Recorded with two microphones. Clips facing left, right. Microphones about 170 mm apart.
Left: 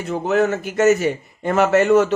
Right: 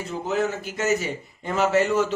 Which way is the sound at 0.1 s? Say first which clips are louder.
Left 7 dB; 65° left (ahead or behind).